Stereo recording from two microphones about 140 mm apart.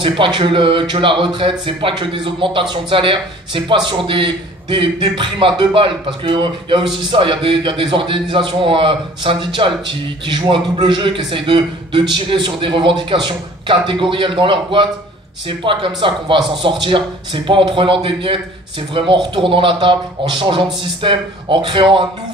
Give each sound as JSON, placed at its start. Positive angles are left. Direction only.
{"t": 0.0, "sound": "a man's voice", "side_deg": -35}